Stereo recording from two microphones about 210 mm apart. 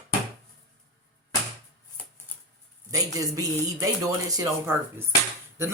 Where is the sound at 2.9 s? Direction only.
15° right (ahead or behind).